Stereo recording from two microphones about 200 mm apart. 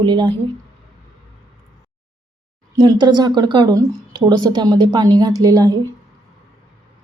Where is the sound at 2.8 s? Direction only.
20° right (ahead or behind).